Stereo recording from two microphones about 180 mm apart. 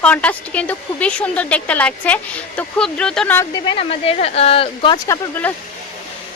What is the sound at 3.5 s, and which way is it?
Speech, 30° left (ahead or behind).